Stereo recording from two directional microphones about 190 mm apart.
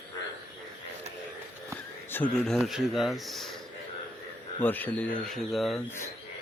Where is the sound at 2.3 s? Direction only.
5° left (ahead or behind).